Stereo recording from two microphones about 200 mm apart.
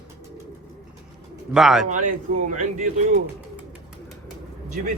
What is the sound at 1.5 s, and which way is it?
Speech, centre (ahead or behind).